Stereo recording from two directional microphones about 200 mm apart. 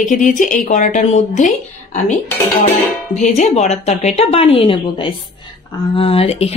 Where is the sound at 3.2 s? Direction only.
35° left (ahead or behind).